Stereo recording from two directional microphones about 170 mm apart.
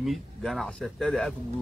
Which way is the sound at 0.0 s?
Centre (ahead or behind).